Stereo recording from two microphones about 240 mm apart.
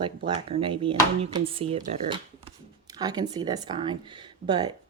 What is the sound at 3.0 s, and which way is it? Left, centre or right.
Speech, centre.